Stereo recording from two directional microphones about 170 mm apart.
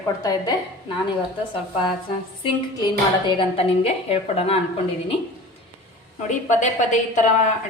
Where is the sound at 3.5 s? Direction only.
35° left (ahead or behind).